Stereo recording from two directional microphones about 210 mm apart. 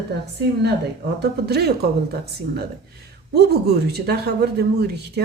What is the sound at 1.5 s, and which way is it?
A woman's voice, 50° right (ahead or behind).